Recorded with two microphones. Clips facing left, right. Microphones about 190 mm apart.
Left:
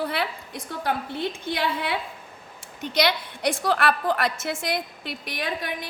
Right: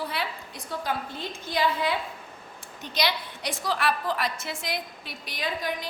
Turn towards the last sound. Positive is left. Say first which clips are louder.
# left 1 dB
turn(degrees=60)  # may be behind; listen again after turning